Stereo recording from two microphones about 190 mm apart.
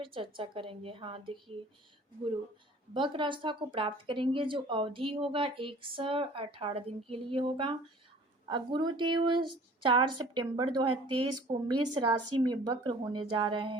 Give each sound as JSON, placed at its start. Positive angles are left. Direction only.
{"t": 0.0, "sound": "speech", "side_deg": -25}
{"t": 2.9, "sound": "speech", "side_deg": -25}